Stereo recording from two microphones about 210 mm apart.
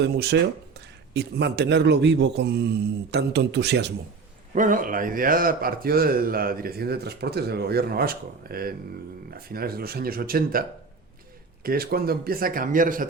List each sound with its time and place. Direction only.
0.0 s a man's voice: 55° right (ahead or behind)
4.5 s a man's voice: 40° right (ahead or behind)
11.6 s a man's voice: 45° right (ahead or behind)